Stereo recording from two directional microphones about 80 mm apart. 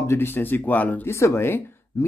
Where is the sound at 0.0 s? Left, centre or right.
Left.